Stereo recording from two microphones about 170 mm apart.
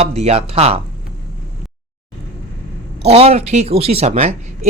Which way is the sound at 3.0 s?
40° right (ahead or behind).